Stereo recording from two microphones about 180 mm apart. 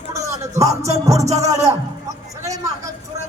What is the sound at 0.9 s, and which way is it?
Speech, 15° right (ahead or behind).